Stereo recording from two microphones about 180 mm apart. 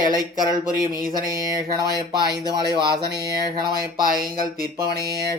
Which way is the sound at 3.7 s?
55° right (ahead or behind).